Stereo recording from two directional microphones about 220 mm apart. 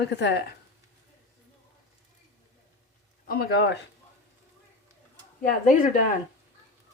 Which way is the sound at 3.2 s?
45° left (ahead or behind).